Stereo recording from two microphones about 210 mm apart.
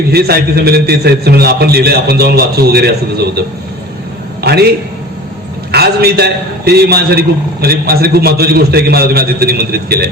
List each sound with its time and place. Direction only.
0.1 s a man's voice: 50° right (ahead or behind)
4.4 s a man's voice: 50° right (ahead or behind)
5.7 s a man's voice: 50° right (ahead or behind)